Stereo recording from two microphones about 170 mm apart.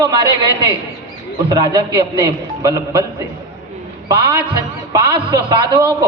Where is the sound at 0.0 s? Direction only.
25° right (ahead or behind).